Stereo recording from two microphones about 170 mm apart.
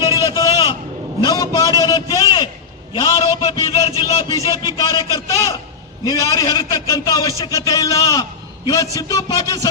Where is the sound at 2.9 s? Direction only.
25° left (ahead or behind).